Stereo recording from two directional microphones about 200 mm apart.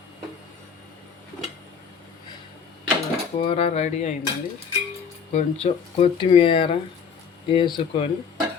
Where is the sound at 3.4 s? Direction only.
30° left (ahead or behind).